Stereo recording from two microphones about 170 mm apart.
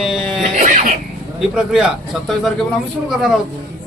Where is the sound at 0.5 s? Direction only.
50° right (ahead or behind).